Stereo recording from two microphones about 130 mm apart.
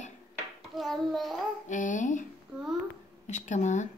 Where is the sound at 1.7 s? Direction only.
75° left (ahead or behind).